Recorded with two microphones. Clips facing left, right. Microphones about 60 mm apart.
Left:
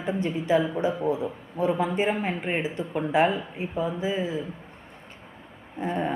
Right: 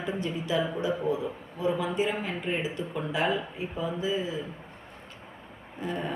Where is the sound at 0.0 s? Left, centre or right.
Left.